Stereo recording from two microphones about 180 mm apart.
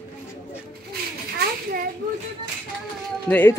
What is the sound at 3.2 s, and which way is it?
Speech, 10° left (ahead or behind).